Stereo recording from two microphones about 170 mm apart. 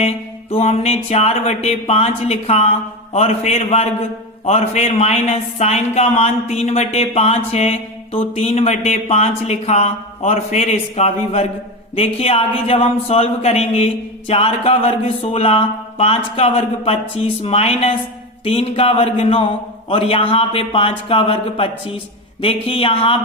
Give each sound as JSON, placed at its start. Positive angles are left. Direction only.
{"t": 0.5, "sound": "speech", "side_deg": 35}